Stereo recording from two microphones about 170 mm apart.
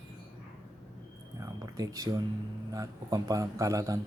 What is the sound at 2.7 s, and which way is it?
A man's voice, 20° right (ahead or behind).